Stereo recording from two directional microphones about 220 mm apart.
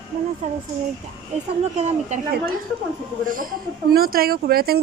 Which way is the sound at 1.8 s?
30° right (ahead or behind).